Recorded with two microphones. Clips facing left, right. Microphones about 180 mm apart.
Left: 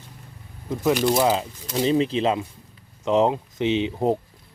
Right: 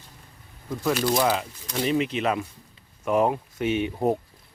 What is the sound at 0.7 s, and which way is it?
Speech, 20° left (ahead or behind).